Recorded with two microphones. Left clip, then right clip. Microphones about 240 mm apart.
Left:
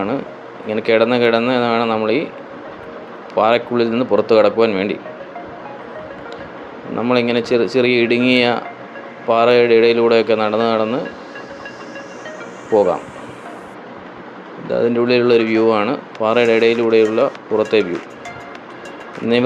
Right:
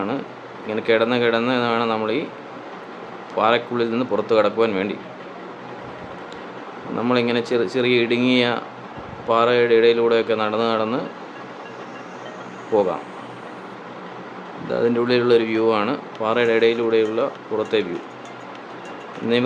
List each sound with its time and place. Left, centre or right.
0.7 s speech: centre
3.3 s speech: centre
6.9 s speech: centre
14.7 s speech: centre